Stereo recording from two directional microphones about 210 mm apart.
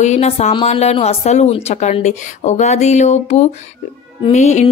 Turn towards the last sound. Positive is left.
turn(degrees=35)  # may be behind; listen again after turning